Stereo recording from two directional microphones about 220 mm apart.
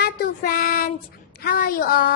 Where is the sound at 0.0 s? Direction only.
40° left (ahead or behind).